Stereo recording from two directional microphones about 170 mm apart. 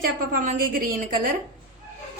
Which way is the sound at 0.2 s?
55° right (ahead or behind).